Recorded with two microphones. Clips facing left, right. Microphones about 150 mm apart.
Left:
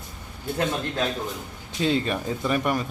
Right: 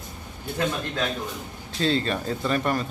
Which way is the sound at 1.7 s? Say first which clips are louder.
Even; 15° left (ahead or behind).